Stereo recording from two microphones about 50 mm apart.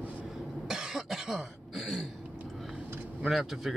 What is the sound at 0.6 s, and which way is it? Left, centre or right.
Cough, centre.